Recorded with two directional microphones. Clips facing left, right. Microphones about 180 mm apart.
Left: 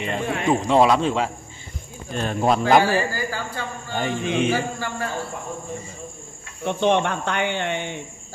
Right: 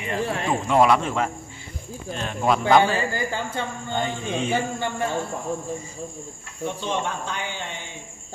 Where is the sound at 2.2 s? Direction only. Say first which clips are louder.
Left 3 dB; 40° left (ahead or behind).